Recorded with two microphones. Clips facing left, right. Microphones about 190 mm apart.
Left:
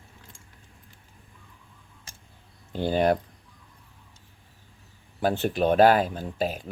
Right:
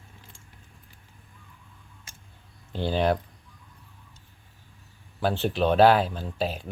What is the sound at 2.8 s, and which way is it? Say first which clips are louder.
Speech: left 2 dB; 50° left (ahead or behind).